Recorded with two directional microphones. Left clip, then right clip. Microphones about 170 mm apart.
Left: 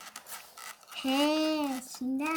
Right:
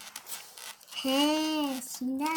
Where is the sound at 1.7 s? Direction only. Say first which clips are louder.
Even; 5° left (ahead or behind).